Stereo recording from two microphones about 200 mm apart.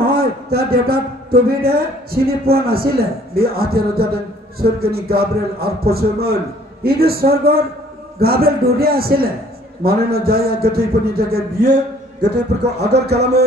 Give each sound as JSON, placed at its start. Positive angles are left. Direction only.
{"t": 0.0, "sound": "a man's voice", "side_deg": -50}